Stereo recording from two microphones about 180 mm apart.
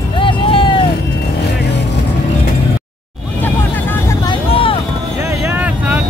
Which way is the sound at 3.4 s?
10° left (ahead or behind).